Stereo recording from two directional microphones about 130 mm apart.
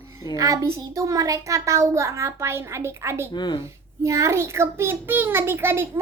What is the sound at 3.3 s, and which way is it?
Speech, 35° left (ahead or behind).